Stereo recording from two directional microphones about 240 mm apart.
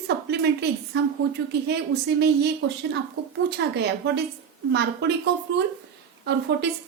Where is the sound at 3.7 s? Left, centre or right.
Right.